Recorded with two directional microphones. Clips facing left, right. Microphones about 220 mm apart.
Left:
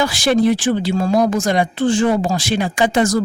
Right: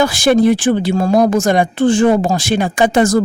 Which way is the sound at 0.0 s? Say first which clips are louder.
Right 4 dB; 50° right (ahead or behind).